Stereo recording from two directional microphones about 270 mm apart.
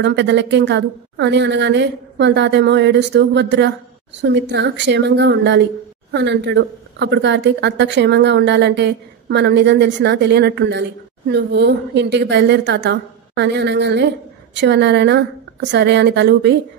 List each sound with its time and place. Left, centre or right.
0.0 s speech: right